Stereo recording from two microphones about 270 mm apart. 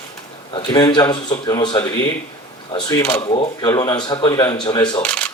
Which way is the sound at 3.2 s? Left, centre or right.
Centre.